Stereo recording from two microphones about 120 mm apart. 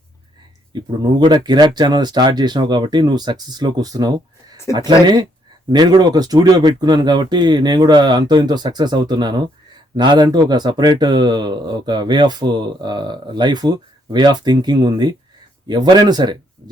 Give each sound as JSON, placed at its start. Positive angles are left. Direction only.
{"t": 0.7, "sound": "speech", "side_deg": -40}